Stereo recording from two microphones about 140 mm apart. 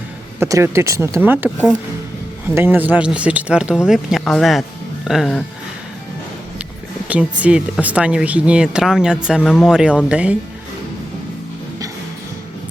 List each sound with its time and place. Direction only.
0.3 s speech: 20° right (ahead or behind)
2.6 s speech: 10° right (ahead or behind)
7.1 s speech: 10° right (ahead or behind)